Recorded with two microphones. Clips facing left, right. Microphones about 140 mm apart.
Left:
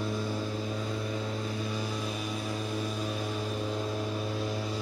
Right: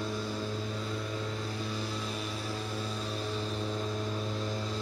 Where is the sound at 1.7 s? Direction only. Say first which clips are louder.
Left 2 dB; 15° left (ahead or behind).